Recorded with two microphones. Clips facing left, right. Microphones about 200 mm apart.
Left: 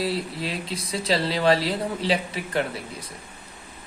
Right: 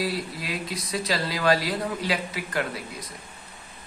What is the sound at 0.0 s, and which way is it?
Speech, 25° left (ahead or behind).